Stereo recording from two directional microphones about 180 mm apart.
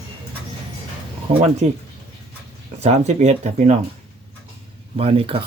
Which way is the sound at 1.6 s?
40° right (ahead or behind).